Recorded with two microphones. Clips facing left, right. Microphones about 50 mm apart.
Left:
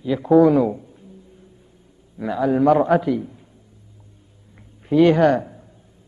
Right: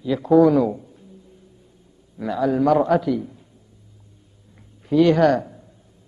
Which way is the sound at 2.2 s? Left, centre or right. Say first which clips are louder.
Left 1 dB; centre.